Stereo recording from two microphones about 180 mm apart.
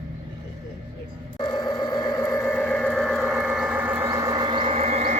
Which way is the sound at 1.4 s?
25° left (ahead or behind).